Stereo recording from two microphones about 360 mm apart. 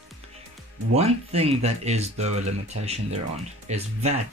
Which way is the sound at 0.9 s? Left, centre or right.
Centre.